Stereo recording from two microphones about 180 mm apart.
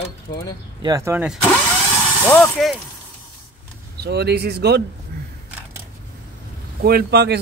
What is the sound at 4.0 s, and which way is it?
Speech, 65° right (ahead or behind).